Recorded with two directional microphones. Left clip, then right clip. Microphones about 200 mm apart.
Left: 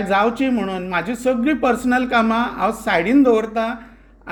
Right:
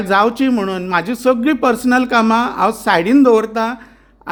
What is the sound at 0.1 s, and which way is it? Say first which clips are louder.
A man's voice: right 4 dB; 50° right (ahead or behind).